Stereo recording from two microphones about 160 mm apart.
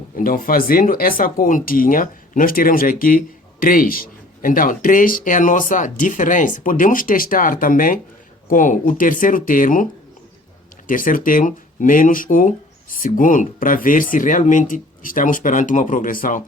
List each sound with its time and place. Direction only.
0.2 s speech: 60° left (ahead or behind)
10.8 s speech: 60° left (ahead or behind)